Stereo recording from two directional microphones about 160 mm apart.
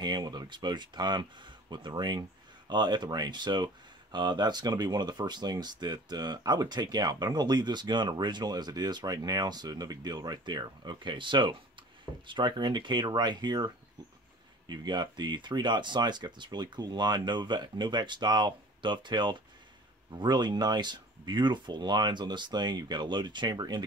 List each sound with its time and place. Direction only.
0.0 s speech: 25° right (ahead or behind)
14.9 s speech: 25° right (ahead or behind)